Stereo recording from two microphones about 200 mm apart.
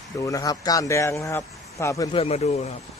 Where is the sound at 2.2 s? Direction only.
30° left (ahead or behind).